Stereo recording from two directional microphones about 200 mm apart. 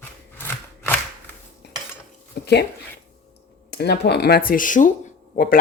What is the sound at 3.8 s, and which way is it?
Speech, 55° left (ahead or behind).